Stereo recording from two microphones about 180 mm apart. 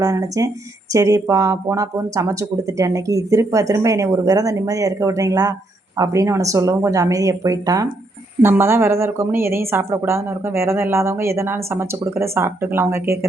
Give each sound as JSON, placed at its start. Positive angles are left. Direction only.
{"t": 0.0, "sound": "a woman's voice", "side_deg": -20}